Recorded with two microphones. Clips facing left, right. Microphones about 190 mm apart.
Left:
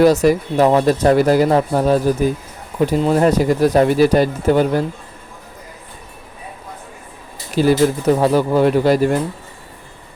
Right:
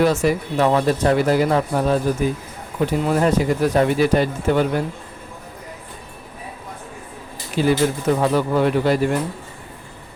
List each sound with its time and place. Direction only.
0.0 s speech: 40° left (ahead or behind)
7.5 s speech: 40° left (ahead or behind)